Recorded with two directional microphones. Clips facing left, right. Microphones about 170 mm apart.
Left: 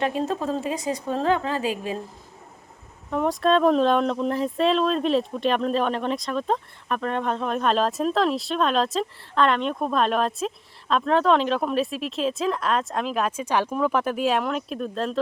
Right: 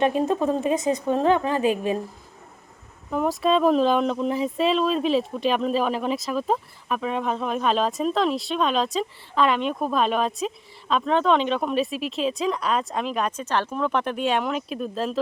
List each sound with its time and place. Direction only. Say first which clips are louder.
0.0 s a woman's voice: right 4 dB; 20° right (ahead or behind)
3.1 s speech: left 1 dB; 5° right (ahead or behind)